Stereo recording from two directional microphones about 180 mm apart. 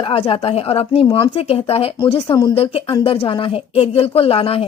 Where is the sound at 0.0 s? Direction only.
30° left (ahead or behind).